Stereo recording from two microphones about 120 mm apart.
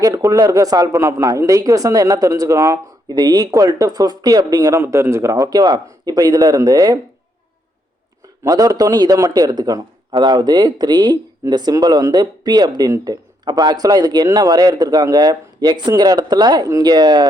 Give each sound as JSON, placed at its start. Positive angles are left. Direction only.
{"t": 0.0, "sound": "speech", "side_deg": -30}
{"t": 8.4, "sound": "speech", "side_deg": -30}